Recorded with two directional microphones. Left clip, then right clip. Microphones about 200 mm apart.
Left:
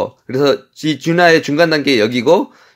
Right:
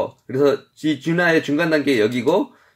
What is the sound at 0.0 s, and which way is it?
Speech, 45° left (ahead or behind).